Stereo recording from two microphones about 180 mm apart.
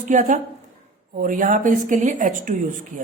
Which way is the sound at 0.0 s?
45° right (ahead or behind).